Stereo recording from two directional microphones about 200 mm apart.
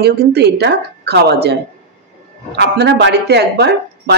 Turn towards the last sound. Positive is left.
turn(degrees=-55)  # may be behind; listen again after turning